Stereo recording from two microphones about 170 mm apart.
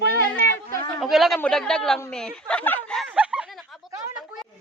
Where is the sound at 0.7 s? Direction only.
20° left (ahead or behind).